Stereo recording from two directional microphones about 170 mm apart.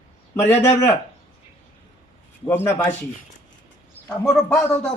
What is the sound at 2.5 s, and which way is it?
Speech, 15° left (ahead or behind).